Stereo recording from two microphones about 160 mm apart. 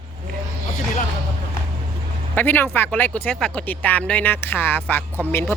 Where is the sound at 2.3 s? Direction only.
15° left (ahead or behind).